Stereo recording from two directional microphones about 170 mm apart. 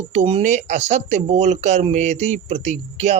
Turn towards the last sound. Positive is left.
turn(degrees=-40)  # may be behind; listen again after turning